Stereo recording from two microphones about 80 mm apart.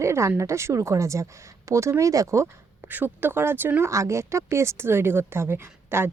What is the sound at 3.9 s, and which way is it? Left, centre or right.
Speech, right.